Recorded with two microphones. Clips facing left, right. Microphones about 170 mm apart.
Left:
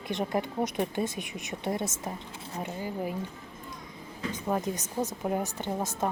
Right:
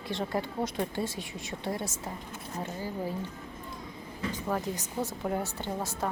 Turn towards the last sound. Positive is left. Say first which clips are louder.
# left 2 dB
turn(degrees=20)  # may be behind; listen again after turning